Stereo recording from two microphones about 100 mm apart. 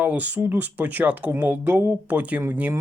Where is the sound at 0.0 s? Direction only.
15° right (ahead or behind).